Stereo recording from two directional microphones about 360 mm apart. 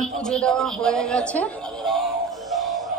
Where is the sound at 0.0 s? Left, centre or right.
Centre.